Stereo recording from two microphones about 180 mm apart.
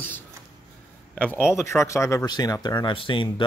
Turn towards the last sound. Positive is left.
turn(degrees=30)  # may be behind; listen again after turning